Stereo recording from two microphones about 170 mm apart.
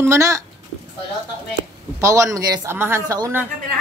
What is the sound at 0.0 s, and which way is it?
Speech, 20° right (ahead or behind).